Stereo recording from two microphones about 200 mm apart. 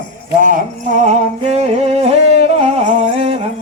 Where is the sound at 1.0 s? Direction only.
35° right (ahead or behind).